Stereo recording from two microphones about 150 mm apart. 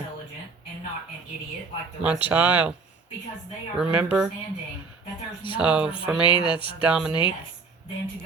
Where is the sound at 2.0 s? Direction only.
10° right (ahead or behind).